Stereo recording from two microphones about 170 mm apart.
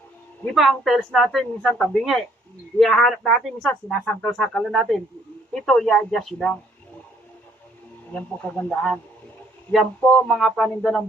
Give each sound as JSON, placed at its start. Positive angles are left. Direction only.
{"t": 0.5, "sound": "speech", "side_deg": 0}
{"t": 8.5, "sound": "speech", "side_deg": 5}